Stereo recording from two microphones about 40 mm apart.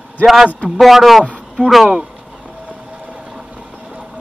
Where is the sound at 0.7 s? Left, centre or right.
Centre.